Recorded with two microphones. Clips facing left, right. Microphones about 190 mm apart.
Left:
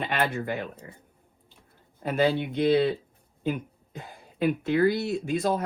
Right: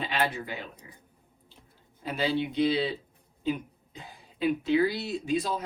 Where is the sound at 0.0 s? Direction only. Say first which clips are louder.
Left 2 dB; 55° left (ahead or behind).